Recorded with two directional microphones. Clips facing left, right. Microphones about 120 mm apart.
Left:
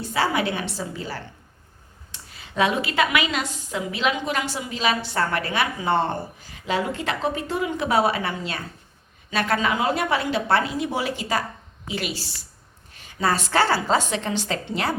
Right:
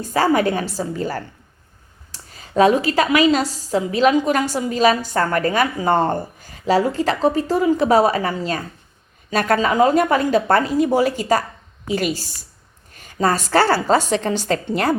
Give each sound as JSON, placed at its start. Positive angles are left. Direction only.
{"t": 0.0, "sound": "a woman's voice", "side_deg": -45}